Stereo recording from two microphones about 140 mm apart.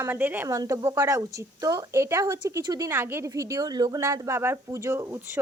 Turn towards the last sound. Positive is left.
turn(degrees=-20)  # may be behind; listen again after turning